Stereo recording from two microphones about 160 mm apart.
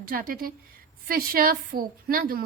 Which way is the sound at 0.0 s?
65° right (ahead or behind).